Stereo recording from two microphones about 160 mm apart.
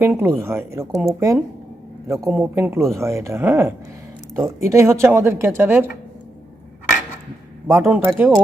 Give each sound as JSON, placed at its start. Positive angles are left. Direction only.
{"t": 0.0, "sound": "speech", "side_deg": -15}
{"t": 7.9, "sound": "speech", "side_deg": -10}